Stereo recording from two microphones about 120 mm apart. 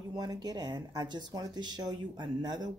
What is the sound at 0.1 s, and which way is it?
Speech, 35° right (ahead or behind).